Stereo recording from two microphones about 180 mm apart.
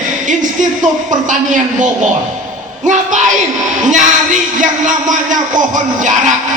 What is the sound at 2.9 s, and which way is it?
Speech, 40° right (ahead or behind).